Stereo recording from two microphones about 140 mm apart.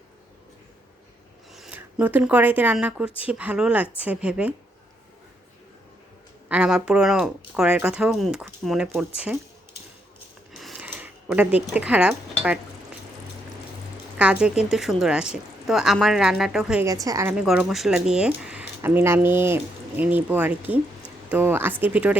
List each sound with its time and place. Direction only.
1.5 s speech: 5° right (ahead or behind)
6.5 s speech: 5° right (ahead or behind)
10.6 s a sound: centre (ahead or behind)
10.8 s a sound: 15° right (ahead or behind)
11.7 s speech: 10° right (ahead or behind)
14.2 s speech: 10° right (ahead or behind)
16.8 s a woman's voice: 25° right (ahead or behind)
17.3 s speech: 5° right (ahead or behind)